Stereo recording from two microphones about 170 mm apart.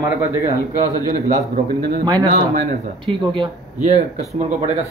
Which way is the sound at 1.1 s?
45° right (ahead or behind).